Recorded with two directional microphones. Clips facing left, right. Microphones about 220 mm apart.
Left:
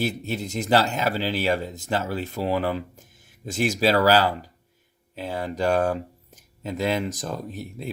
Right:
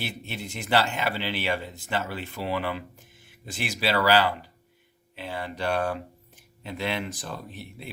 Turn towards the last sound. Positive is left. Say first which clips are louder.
# left 7 dB
turn(degrees=40)  # may be behind; listen again after turning